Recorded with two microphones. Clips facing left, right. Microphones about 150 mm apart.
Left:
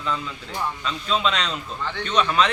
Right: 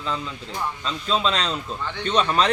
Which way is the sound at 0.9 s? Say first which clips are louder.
Right 1 dB; 35° right (ahead or behind).